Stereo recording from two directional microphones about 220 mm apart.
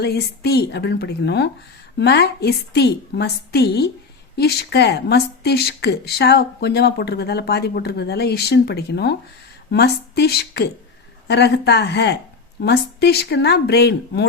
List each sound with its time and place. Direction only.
0.0 s speech: 45° left (ahead or behind)